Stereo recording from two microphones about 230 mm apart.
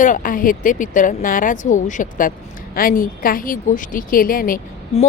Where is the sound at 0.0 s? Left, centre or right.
Left.